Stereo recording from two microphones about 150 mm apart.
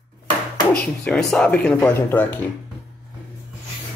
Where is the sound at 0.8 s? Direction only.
5° left (ahead or behind).